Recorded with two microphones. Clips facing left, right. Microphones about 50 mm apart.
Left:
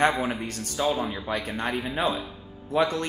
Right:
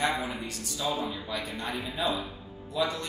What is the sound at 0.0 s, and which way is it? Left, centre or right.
A man's voice, left.